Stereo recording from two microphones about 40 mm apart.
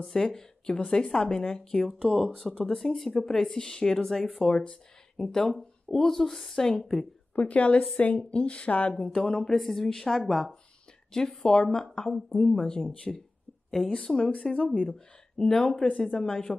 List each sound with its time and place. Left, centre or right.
0.0 s a woman's voice: centre
7.3 s speech: left
8.9 s speech: left
15.7 s speech: left
16.2 s speech: centre